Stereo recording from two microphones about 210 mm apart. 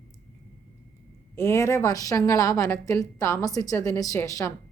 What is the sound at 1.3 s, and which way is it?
A woman's voice, 15° left (ahead or behind).